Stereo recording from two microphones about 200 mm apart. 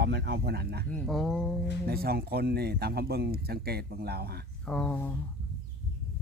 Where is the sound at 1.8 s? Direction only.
50° right (ahead or behind).